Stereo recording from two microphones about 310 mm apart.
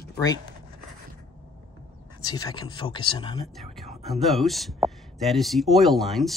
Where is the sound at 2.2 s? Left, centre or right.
Centre.